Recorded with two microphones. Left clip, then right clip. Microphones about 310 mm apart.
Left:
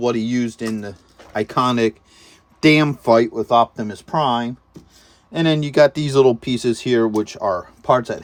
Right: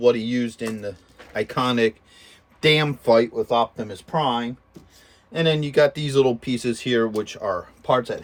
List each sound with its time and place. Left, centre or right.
0.0 s speech: centre